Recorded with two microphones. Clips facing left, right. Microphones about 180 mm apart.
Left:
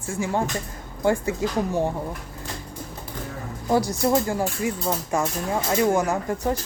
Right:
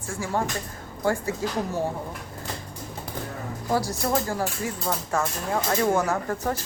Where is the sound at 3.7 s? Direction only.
20° left (ahead or behind).